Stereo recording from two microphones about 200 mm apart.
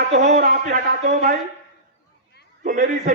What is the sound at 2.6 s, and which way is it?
Speech, 40° right (ahead or behind).